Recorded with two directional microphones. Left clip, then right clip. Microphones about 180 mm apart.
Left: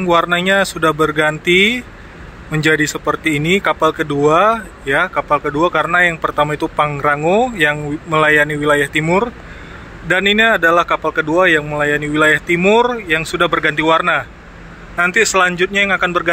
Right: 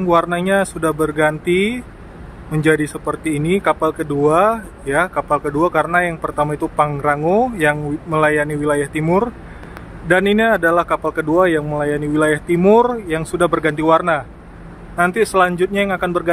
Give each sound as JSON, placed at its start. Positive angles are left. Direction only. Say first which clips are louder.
{"t": 0.0, "sound": "speech", "louder": "left 2 dB", "side_deg": -10}